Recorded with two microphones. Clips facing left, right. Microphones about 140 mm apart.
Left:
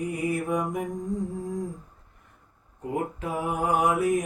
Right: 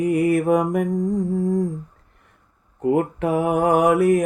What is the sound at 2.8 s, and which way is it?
Speech, 70° right (ahead or behind).